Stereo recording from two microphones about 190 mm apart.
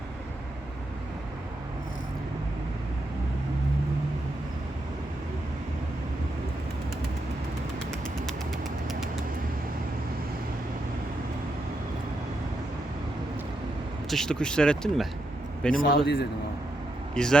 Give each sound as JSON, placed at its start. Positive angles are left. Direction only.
{"t": 14.1, "sound": "speech", "side_deg": 5}
{"t": 16.0, "sound": "a man's voice", "side_deg": 60}
{"t": 17.2, "sound": "speech", "side_deg": 5}